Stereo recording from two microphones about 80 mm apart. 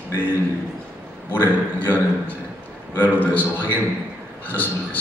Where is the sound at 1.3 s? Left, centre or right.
Left.